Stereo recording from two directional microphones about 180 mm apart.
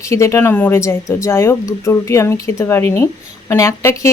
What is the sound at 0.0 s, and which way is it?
Speech, 15° left (ahead or behind).